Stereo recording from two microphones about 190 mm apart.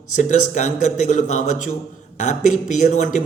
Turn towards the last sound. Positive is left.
turn(degrees=40)  # may be behind; listen again after turning